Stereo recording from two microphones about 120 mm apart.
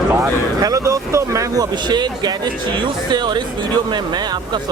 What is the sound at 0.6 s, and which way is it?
Speech, 30° right (ahead or behind).